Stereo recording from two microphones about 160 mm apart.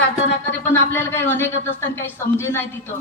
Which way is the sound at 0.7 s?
15° left (ahead or behind).